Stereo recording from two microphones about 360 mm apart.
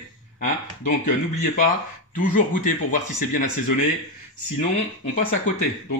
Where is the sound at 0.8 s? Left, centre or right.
Left.